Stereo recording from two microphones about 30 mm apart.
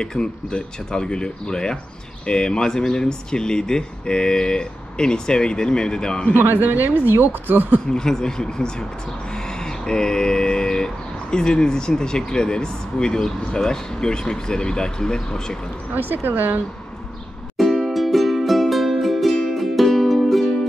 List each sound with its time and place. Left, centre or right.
0.0 s speech: left
6.6 s a woman's voice: right
7.9 s speech: left
9.3 s a sound: left
12.3 s speech: left
15.9 s a woman's voice: right
17.8 s music: centre